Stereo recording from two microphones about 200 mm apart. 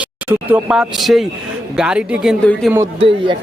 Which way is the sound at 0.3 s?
5° right (ahead or behind).